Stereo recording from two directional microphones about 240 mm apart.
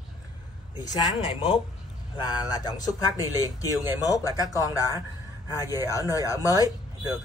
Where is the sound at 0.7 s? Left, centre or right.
Centre.